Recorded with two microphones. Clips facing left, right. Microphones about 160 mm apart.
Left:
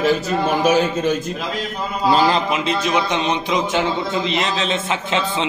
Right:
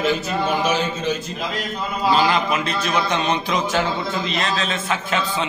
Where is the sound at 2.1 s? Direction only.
35° left (ahead or behind).